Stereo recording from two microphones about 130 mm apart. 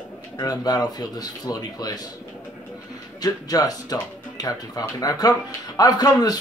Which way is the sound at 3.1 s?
30° left (ahead or behind).